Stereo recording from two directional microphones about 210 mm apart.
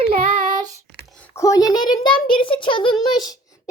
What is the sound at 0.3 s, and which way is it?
Child singing, 40° right (ahead or behind).